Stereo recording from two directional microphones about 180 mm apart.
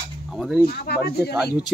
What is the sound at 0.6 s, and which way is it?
Speech, 60° left (ahead or behind).